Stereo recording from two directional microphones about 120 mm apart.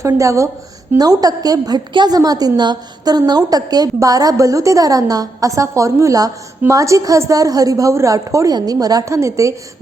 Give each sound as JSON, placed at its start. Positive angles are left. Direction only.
{"t": 0.0, "sound": "a woman's voice", "side_deg": -25}